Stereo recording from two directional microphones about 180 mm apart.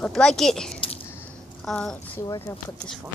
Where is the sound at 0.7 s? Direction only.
30° left (ahead or behind).